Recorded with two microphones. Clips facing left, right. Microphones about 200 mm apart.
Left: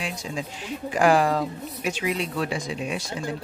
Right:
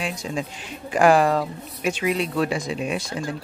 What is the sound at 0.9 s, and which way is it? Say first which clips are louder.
Speech: right 3 dB; 60° right (ahead or behind).